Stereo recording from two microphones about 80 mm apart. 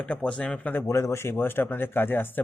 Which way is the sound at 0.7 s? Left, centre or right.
Left.